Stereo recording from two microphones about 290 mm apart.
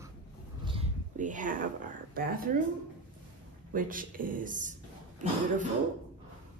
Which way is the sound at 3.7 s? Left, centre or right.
Right.